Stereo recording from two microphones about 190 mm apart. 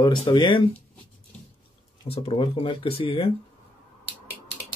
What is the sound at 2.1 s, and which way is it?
Speech, 30° left (ahead or behind).